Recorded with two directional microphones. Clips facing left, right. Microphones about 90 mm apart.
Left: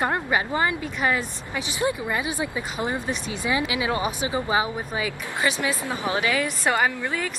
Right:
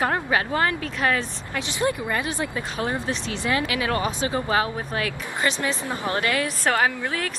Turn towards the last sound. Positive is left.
turn(degrees=5)  # may be behind; listen again after turning